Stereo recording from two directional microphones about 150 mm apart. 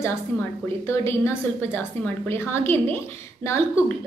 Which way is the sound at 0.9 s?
15° left (ahead or behind).